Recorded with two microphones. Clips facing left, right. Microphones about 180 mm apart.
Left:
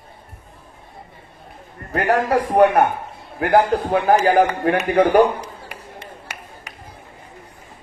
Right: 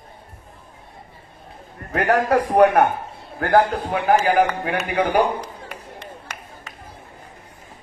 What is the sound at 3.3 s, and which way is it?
Speech, 20° left (ahead or behind).